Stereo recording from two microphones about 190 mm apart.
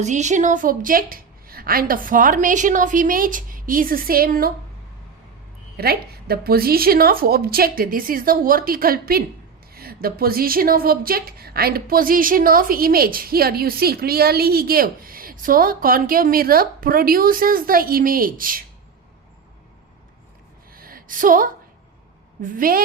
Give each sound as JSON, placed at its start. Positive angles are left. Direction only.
{"t": 0.0, "sound": "a woman's voice", "side_deg": -40}
{"t": 5.7, "sound": "a woman's voice", "side_deg": -55}
{"t": 20.7, "sound": "a sound", "side_deg": -50}
{"t": 22.4, "sound": "a woman's voice", "side_deg": -45}